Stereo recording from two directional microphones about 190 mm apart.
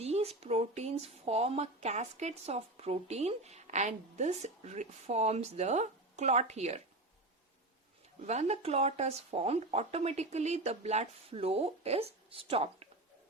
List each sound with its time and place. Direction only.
0.0 s speech: 35° right (ahead or behind)
8.3 s speech: 35° right (ahead or behind)